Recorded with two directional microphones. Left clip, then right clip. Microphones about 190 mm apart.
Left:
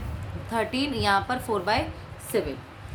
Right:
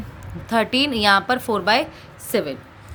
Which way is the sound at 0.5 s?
45° right (ahead or behind).